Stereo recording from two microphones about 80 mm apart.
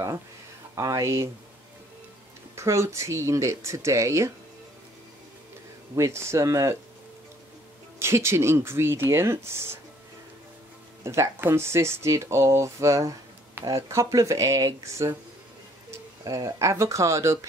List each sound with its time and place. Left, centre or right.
0.7 s speech: right
2.5 s speech: right
5.9 s speech: right
8.0 s speech: right
11.1 s speech: right